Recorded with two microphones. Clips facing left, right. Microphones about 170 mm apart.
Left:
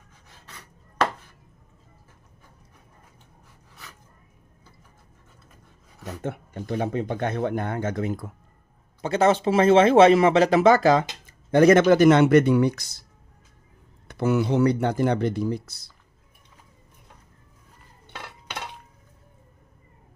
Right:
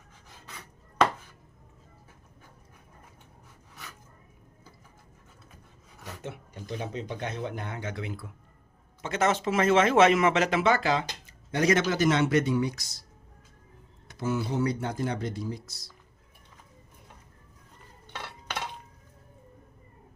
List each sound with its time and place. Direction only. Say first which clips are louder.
6.2 s speech: left 8 dB; 55° left (ahead or behind)
9.0 s speech: left 6 dB; 35° left (ahead or behind); by 12.9 s 60° left (ahead or behind)
14.1 s speech: left 8 dB; 65° left (ahead or behind)